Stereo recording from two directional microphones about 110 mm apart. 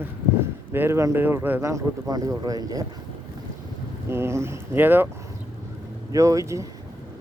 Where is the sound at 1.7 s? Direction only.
35° right (ahead or behind).